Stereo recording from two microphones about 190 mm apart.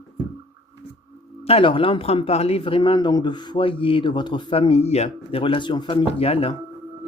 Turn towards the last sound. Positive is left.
turn(degrees=30)  # may be behind; listen again after turning